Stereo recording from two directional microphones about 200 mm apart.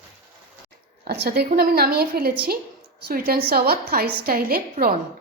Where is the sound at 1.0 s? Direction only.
50° right (ahead or behind).